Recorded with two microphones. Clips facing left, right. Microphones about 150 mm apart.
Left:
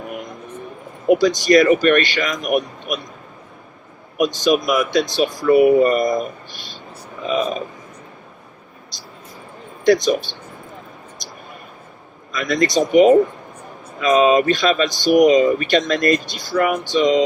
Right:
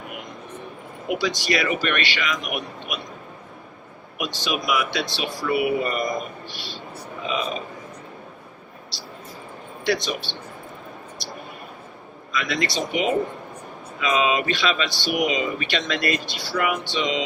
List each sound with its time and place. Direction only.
1.0 s speech: 45° left (ahead or behind)
4.2 s speech: 45° left (ahead or behind)
9.8 s speech: 45° left (ahead or behind)
12.3 s speech: 45° left (ahead or behind)